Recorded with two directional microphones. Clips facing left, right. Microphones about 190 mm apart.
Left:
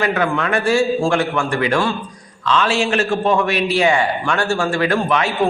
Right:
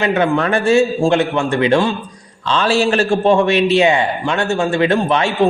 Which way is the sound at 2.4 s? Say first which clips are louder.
Right 2 dB; 30° right (ahead or behind).